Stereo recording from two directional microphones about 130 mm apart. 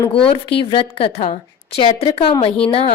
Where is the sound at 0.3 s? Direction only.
40° left (ahead or behind).